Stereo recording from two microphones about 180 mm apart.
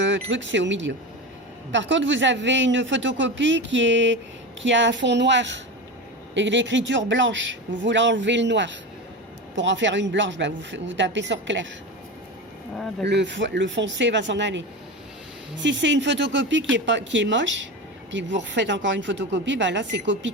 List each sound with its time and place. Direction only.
0.0 s speech: 90° right
13.1 s speech: 75° right (ahead or behind)